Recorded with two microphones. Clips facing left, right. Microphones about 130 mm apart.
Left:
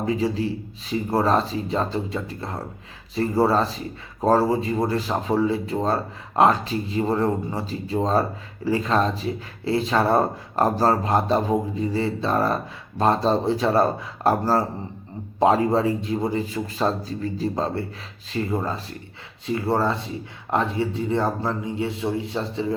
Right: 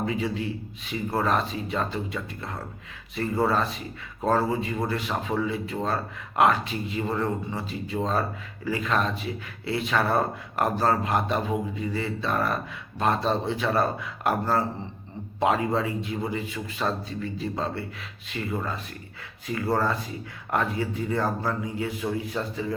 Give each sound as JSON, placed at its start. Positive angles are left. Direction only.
{"t": 0.0, "sound": "speech", "side_deg": 35}